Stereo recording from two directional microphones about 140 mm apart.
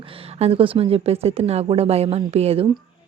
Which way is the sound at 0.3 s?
45° right (ahead or behind).